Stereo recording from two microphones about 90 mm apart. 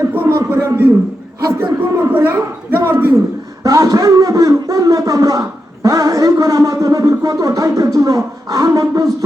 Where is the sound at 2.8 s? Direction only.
30° right (ahead or behind).